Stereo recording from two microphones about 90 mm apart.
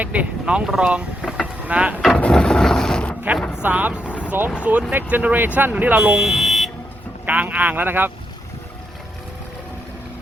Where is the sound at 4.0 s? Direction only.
20° left (ahead or behind).